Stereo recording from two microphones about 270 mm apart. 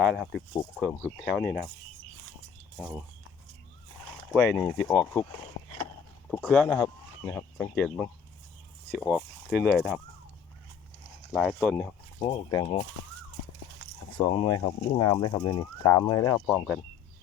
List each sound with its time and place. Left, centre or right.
0.0 s speech: centre
2.7 s speech: centre
4.3 s speech: centre
6.2 s speech: centre
11.3 s speech: centre
12.2 s speech: centre
14.3 s speech: centre
16.5 s speech: centre